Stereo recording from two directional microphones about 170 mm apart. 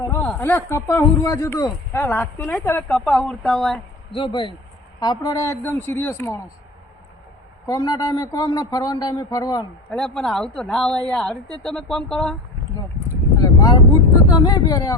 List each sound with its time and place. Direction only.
0.0 s speech: 10° left (ahead or behind)
4.1 s speech: 30° left (ahead or behind); by 6.4 s 15° left (ahead or behind)
7.7 s speech: 20° left (ahead or behind)
9.9 s speech: 5° left (ahead or behind)
13.4 s vehicle: 20° left (ahead or behind)
14.3 s speech: 25° left (ahead or behind)